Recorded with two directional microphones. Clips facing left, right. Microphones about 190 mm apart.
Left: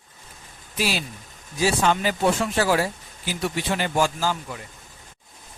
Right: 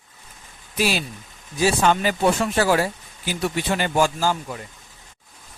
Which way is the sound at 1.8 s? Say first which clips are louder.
Right 2 dB; 55° right (ahead or behind).